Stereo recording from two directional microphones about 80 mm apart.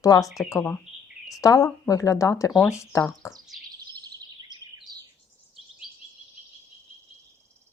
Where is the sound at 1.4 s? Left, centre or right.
Left.